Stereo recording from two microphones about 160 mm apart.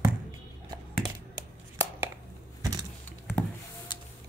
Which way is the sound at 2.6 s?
25° right (ahead or behind).